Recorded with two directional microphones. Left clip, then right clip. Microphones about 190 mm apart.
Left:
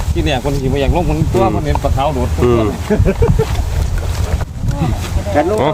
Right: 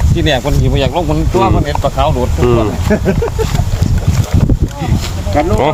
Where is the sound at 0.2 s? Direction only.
45° right (ahead or behind).